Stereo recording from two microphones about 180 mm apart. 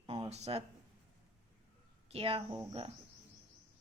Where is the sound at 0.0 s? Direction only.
30° right (ahead or behind).